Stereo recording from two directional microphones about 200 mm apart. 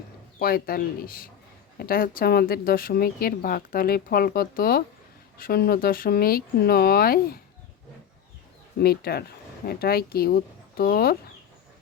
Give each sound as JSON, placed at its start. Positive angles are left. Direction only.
{"t": 0.3, "sound": "speech", "side_deg": 45}
{"t": 8.8, "sound": "speech", "side_deg": 50}